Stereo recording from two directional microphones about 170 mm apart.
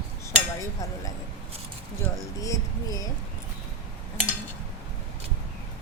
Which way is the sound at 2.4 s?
20° left (ahead or behind).